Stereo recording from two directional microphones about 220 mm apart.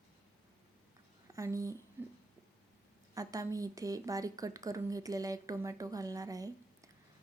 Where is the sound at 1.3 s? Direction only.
15° right (ahead or behind).